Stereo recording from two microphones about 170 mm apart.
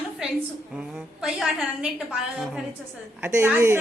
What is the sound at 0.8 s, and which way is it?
A woman's voice, 5° right (ahead or behind).